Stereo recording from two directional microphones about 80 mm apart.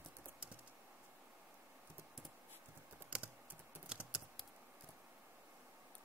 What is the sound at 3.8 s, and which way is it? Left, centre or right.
Typing, centre.